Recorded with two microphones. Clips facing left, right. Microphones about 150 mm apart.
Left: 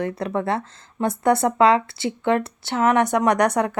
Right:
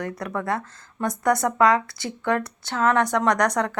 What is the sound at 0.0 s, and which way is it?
A woman's voice, 25° left (ahead or behind).